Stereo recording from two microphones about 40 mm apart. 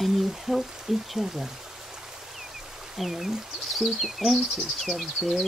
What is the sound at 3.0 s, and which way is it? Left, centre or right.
Speech, centre.